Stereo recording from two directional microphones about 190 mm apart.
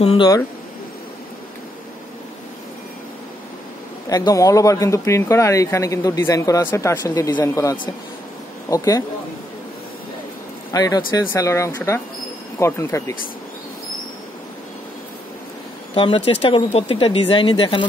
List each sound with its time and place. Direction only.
0.0 s speech: 30° left (ahead or behind)
4.1 s speech: 20° left (ahead or behind)
10.7 s speech: 20° left (ahead or behind)
15.9 s speech: 30° left (ahead or behind)